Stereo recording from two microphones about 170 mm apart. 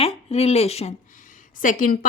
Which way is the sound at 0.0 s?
40° left (ahead or behind).